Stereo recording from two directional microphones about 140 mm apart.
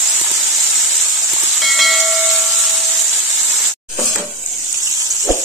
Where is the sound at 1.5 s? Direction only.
Centre (ahead or behind).